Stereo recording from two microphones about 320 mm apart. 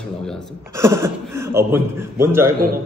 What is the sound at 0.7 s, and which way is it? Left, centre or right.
Speech, centre.